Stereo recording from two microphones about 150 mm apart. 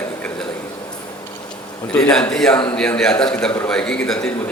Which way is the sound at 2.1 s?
5° left (ahead or behind).